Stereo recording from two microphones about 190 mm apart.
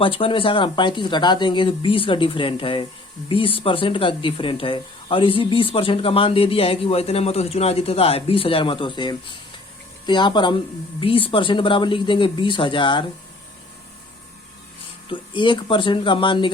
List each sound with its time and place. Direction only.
0.0 s speech: 30° left (ahead or behind)
15.1 s speech: 25° left (ahead or behind)